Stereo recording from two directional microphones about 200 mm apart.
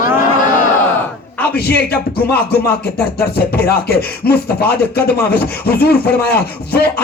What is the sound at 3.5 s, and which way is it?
Speech, 50° left (ahead or behind).